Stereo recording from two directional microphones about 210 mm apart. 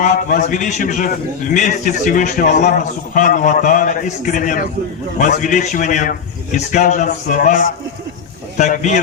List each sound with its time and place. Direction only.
0.0 s a man's voice: 35° left (ahead or behind)